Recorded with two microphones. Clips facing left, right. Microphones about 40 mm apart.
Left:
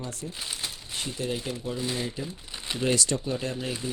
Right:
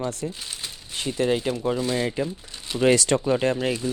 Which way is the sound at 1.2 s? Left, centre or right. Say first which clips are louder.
Right 10 dB; right.